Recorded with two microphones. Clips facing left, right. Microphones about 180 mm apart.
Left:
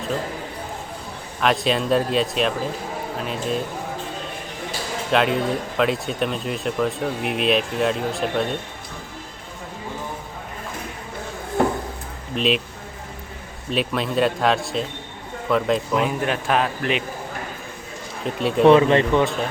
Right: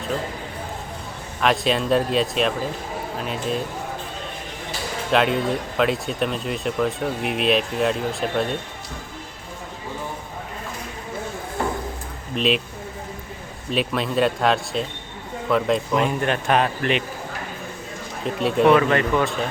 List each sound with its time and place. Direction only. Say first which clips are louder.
1.4 s speech: even; centre (ahead or behind)
5.1 s speech: even; centre (ahead or behind)
12.3 s speech: even; centre (ahead or behind)
13.7 s speech: even; centre (ahead or behind)
18.3 s speech: even; centre (ahead or behind)
18.6 s speech: left 3 dB; 25° left (ahead or behind)